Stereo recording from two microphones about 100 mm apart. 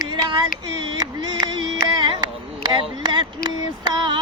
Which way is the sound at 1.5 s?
50° right (ahead or behind).